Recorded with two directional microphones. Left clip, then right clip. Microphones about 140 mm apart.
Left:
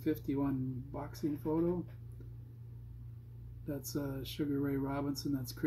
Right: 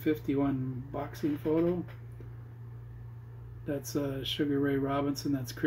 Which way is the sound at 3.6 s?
15° left (ahead or behind).